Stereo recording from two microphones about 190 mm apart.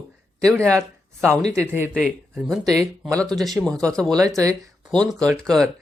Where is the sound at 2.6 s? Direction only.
15° right (ahead or behind).